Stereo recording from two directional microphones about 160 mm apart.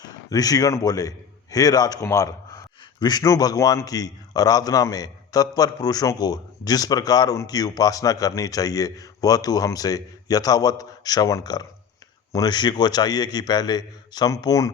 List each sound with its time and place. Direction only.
0.0 s a man's voice: 25° left (ahead or behind)